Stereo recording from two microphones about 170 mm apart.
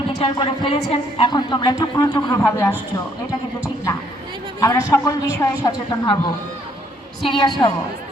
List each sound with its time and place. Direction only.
0.2 s speech: 30° left (ahead or behind)
1.3 s a man's voice: 25° left (ahead or behind)
4.6 s a man's voice: 20° left (ahead or behind)
7.3 s a man's voice: 30° left (ahead or behind)